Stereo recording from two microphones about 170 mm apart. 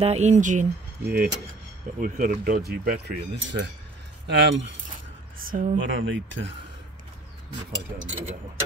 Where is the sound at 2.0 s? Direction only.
55° right (ahead or behind); by 3.6 s 70° right (ahead or behind).